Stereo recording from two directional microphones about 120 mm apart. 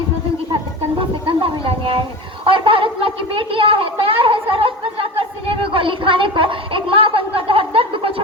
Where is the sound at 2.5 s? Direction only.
45° right (ahead or behind).